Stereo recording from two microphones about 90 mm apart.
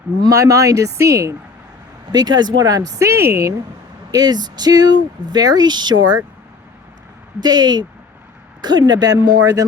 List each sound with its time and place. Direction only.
0.2 s speech: 40° right (ahead or behind)
2.1 s speech: 50° right (ahead or behind); by 3.5 s 30° right (ahead or behind)
4.1 s speech: 50° right (ahead or behind)
7.4 s speech: 50° right (ahead or behind)
8.9 s speech: 50° right (ahead or behind)